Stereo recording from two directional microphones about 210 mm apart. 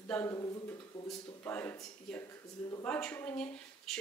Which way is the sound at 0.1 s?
10° left (ahead or behind).